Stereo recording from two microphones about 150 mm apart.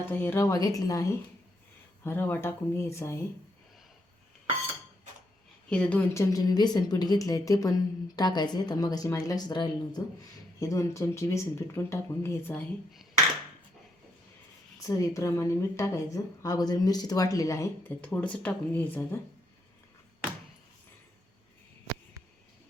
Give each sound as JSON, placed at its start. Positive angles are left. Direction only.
{"t": 0.1, "sound": "a woman's voice", "side_deg": 15}
{"t": 5.6, "sound": "speech", "side_deg": 5}
{"t": 6.1, "sound": "a woman's voice", "side_deg": 25}
{"t": 14.8, "sound": "a woman's voice", "side_deg": 20}